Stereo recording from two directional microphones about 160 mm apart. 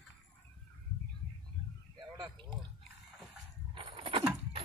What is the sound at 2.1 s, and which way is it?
Drip, 25° right (ahead or behind).